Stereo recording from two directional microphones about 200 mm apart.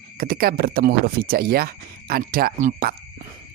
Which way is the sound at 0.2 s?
50° right (ahead or behind).